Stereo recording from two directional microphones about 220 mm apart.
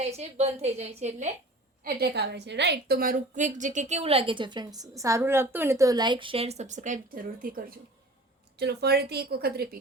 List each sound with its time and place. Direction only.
0.0 s a woman's voice: 30° right (ahead or behind)
1.8 s a woman's voice: 45° right (ahead or behind)
8.5 s speech: 50° right (ahead or behind)